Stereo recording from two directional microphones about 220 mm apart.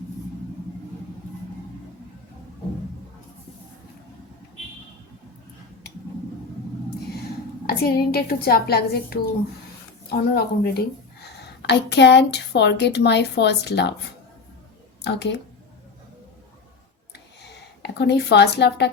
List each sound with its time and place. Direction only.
7.7 s a woman's voice: 45° left (ahead or behind)
15.0 s a woman's voice: 50° left (ahead or behind)
17.4 s speech: 50° left (ahead or behind)